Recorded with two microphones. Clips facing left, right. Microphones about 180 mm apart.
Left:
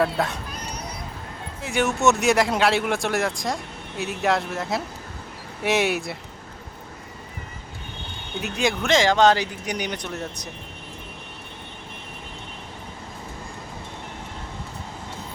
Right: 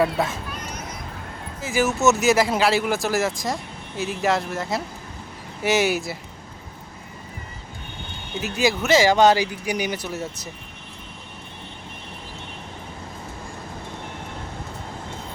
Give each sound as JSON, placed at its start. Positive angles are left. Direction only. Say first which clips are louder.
{"t": 0.0, "sound": "speech", "louder": "right 1 dB", "side_deg": 0}
{"t": 0.5, "sound": "a sound", "louder": "even", "side_deg": 35}
{"t": 1.6, "sound": "speech", "louder": "right 1 dB", "side_deg": 0}
{"t": 8.4, "sound": "speech", "louder": "right 2 dB", "side_deg": -5}